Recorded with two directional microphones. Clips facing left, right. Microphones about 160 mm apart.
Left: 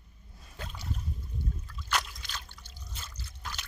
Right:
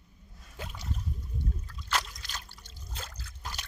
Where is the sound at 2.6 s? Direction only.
25° right (ahead or behind).